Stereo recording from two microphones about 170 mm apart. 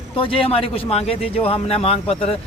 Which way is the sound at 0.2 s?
30° left (ahead or behind).